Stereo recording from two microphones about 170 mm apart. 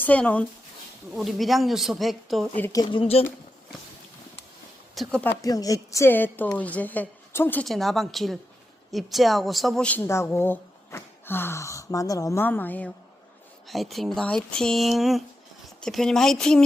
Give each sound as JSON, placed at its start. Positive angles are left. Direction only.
{"t": 0.0, "sound": "a woman's voice", "side_deg": 10}
{"t": 2.6, "sound": "a woman's voice", "side_deg": 15}
{"t": 2.8, "sound": "speech", "side_deg": 30}
{"t": 4.9, "sound": "speech", "side_deg": 5}
{"t": 5.4, "sound": "a woman's voice", "side_deg": 20}